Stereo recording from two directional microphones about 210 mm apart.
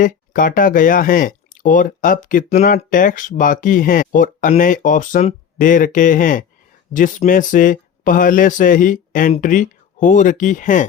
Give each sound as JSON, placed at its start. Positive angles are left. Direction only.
{"t": 0.0, "sound": "speech", "side_deg": 40}